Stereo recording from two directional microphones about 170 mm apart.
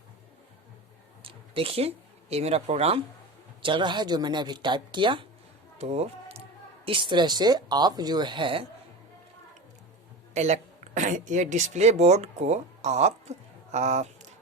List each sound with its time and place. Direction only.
1.2 s speech: 30° right (ahead or behind)
5.7 s music: 40° right (ahead or behind)
6.8 s speech: 30° right (ahead or behind)
10.3 s speech: 40° right (ahead or behind)